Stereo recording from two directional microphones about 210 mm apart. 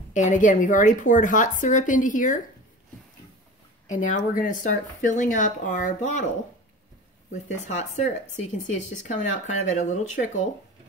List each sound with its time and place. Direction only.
0.1 s speech: 35° left (ahead or behind)
3.9 s speech: 35° left (ahead or behind)
7.3 s speech: 35° left (ahead or behind)